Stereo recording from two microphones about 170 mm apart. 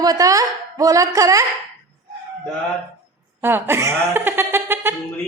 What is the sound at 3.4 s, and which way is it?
Speech, 15° right (ahead or behind).